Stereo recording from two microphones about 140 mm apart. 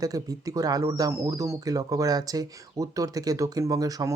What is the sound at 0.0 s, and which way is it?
Speech, 25° right (ahead or behind).